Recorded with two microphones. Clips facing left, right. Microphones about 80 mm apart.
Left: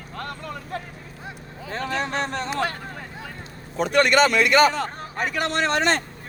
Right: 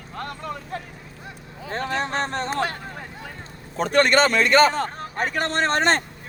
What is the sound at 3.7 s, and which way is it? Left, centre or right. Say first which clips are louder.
Speech: even; right.